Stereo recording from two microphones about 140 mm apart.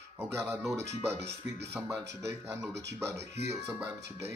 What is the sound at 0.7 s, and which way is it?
Speech, 20° right (ahead or behind).